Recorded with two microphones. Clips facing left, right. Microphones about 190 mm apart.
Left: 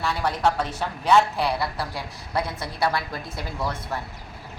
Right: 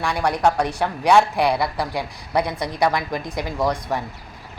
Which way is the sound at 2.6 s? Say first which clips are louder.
Right 5 dB; 15° right (ahead or behind).